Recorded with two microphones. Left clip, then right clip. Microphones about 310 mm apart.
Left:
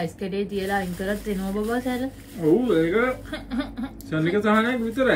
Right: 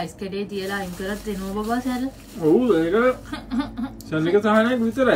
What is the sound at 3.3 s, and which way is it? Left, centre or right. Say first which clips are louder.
Speech: right 2 dB; centre.